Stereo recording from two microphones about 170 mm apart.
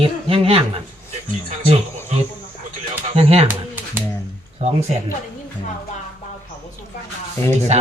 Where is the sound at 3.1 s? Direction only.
35° right (ahead or behind).